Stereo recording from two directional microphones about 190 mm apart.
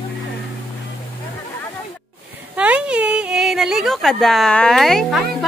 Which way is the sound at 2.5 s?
5° right (ahead or behind).